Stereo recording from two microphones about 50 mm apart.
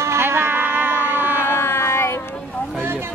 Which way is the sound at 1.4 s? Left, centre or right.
Left.